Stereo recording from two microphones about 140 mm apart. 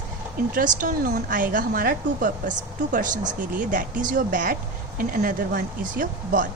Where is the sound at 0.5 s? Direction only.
70° right (ahead or behind).